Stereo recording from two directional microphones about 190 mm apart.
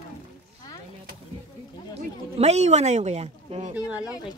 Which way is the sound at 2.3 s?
35° right (ahead or behind).